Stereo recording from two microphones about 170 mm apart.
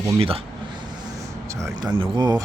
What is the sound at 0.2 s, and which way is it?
Speech, 35° right (ahead or behind).